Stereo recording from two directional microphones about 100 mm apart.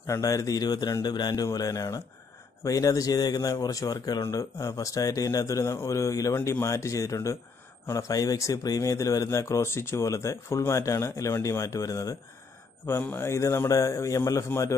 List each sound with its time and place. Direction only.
0.0 s speech: 35° left (ahead or behind)
13.0 s a man's voice: 20° left (ahead or behind)